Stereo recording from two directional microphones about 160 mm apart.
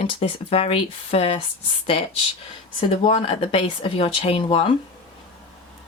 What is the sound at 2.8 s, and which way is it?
Speech, 35° left (ahead or behind).